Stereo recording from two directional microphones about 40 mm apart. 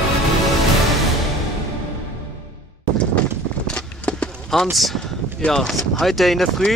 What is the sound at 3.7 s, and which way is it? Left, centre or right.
Clip-clop, left.